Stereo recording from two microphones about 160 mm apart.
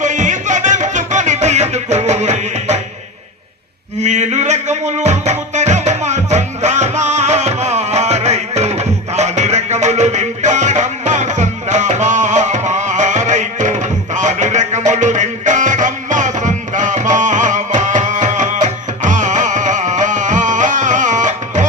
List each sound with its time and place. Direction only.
0.0 s music: 50° right (ahead or behind)
4.0 s music: 45° right (ahead or behind)